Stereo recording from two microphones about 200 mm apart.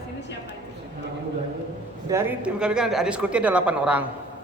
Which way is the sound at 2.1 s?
5° right (ahead or behind).